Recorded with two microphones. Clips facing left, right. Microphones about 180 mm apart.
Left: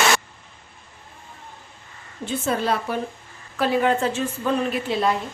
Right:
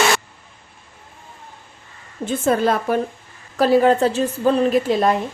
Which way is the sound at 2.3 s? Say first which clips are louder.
Right 5 dB; 50° right (ahead or behind).